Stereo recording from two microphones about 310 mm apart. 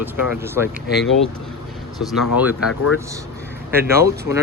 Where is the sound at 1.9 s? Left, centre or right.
Centre.